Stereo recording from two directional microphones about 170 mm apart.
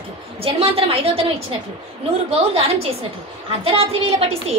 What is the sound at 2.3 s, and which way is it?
A woman's voice, 35° right (ahead or behind).